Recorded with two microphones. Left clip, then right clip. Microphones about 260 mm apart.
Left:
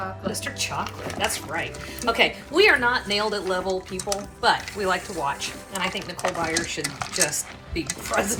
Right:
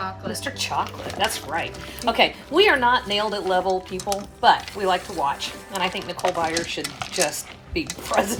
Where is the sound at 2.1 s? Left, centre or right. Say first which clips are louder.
Right 2 dB; right.